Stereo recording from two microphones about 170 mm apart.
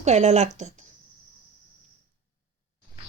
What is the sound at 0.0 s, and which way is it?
Speech, 40° right (ahead or behind).